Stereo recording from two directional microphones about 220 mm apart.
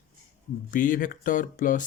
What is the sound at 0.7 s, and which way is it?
Speech, 35° left (ahead or behind).